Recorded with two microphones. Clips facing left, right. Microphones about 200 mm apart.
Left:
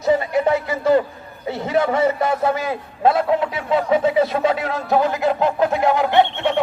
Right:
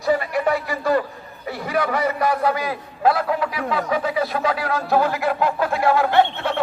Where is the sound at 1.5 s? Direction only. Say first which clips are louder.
Left 4 dB; 25° left (ahead or behind).